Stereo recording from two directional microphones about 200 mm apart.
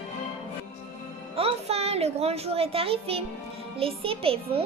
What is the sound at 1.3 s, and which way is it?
A child's voice, 30° right (ahead or behind).